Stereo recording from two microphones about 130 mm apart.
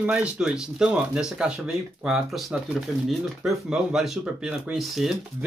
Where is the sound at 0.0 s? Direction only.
10° right (ahead or behind).